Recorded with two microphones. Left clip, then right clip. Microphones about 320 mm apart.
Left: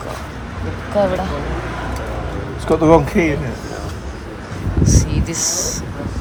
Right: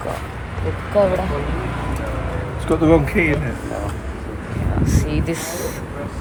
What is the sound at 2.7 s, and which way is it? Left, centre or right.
Speech, centre.